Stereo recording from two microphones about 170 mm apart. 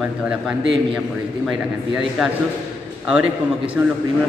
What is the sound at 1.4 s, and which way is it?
Speech, 5° right (ahead or behind).